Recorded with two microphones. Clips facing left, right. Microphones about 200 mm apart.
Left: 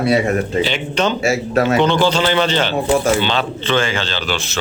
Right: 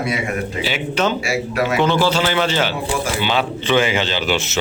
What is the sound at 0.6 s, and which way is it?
A man's voice, 5° right (ahead or behind).